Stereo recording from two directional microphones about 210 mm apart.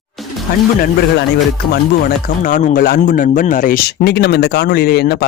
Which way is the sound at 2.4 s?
40° left (ahead or behind).